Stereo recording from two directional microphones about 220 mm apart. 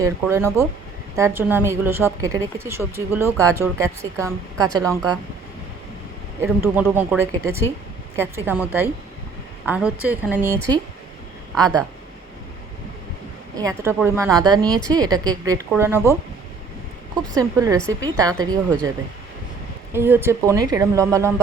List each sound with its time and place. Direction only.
0.0 s a woman's voice: 10° right (ahead or behind)
6.4 s a woman's voice: 10° right (ahead or behind)
11.5 s a woman's voice: 15° right (ahead or behind)
13.6 s a woman's voice: 15° right (ahead or behind)
14.0 s speech: 5° right (ahead or behind)
14.3 s a woman's voice: 20° right (ahead or behind)
17.3 s a woman's voice: 15° right (ahead or behind)
19.9 s a woman's voice: 10° right (ahead or behind)